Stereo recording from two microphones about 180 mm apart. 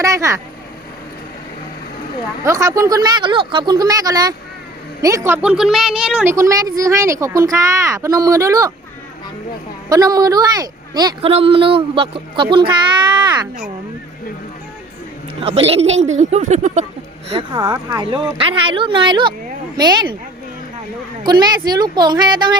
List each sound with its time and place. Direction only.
0.0 s speech: 15° right (ahead or behind)
2.4 s a woman's voice: 15° right (ahead or behind)
6.3 s speech: 15° right (ahead or behind)
9.9 s speech: 20° right (ahead or behind)
15.4 s speech: 35° right (ahead or behind)
17.3 s speech: 25° right (ahead or behind)
21.2 s speech: 25° right (ahead or behind)